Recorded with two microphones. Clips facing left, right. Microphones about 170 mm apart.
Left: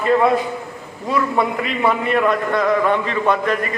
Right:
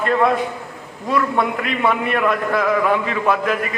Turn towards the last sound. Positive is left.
turn(degrees=-5)  # may be behind; listen again after turning